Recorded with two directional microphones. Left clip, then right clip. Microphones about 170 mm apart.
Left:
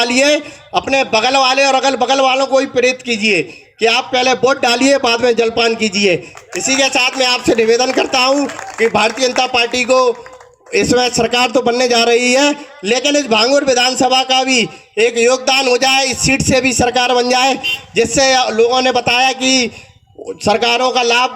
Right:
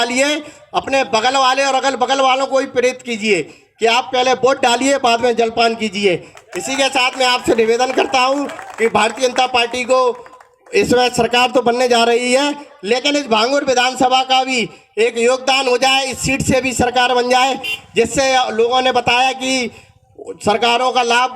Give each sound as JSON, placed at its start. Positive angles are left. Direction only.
{"t": 0.0, "sound": "a man's voice", "side_deg": 35}